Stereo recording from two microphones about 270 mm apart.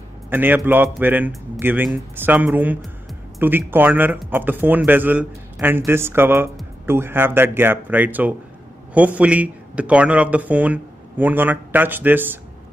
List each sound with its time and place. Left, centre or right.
0.3 s a man's voice: centre